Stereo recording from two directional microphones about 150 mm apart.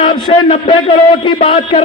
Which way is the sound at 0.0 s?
40° left (ahead or behind).